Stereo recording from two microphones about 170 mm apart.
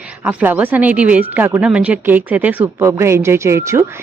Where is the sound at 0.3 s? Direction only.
10° right (ahead or behind).